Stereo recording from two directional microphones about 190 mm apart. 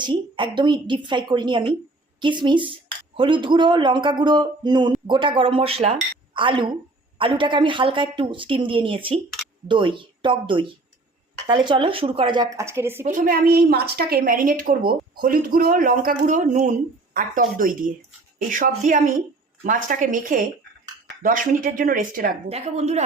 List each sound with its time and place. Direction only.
0.0 s a woman's voice: 25° right (ahead or behind)
13.1 s a woman's voice: 45° right (ahead or behind)
22.4 s speech: 35° right (ahead or behind)